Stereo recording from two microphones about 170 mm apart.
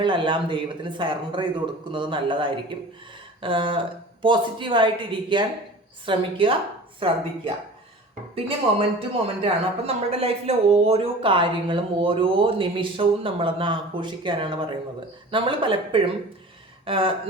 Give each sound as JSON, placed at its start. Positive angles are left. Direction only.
{"t": 0.0, "sound": "a woman's voice", "side_deg": -30}
{"t": 8.4, "sound": "a woman's voice", "side_deg": -30}